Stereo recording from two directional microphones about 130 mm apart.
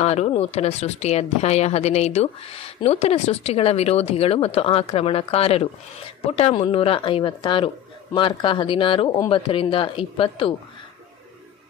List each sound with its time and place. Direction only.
0.0 s a woman's voice: 55° left (ahead or behind)